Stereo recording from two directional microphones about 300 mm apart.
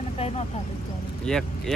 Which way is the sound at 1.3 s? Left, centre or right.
Centre.